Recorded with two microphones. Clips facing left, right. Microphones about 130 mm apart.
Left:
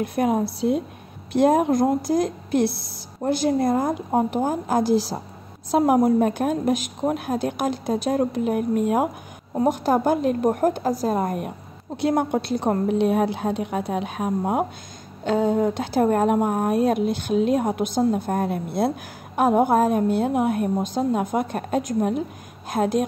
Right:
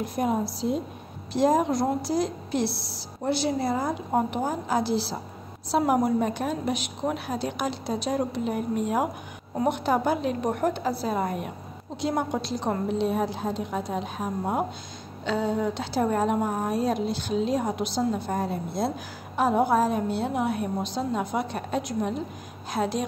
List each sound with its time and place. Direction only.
0.0 s a woman's voice: 65° left (ahead or behind)
9.6 s a woman's voice: 40° left (ahead or behind)
12.0 s a woman's voice: 55° left (ahead or behind)
15.2 s a woman's voice: 50° left (ahead or behind)